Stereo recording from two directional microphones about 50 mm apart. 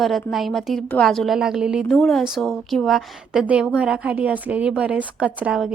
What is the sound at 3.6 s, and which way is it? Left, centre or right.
A woman's voice, right.